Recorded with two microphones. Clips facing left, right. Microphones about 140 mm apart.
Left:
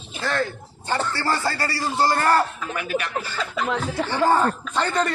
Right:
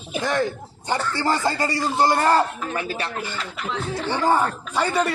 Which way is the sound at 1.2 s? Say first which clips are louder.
Right 2 dB; 15° right (ahead or behind).